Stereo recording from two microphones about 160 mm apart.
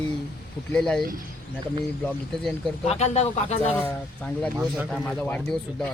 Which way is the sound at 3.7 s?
10° left (ahead or behind).